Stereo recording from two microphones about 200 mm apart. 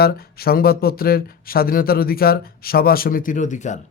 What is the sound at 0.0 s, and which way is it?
Speech, 50° left (ahead or behind).